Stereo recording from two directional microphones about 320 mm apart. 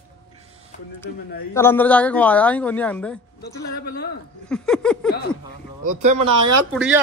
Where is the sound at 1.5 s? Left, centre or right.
Centre.